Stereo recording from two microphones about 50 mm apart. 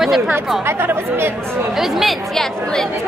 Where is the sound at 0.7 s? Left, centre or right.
Right.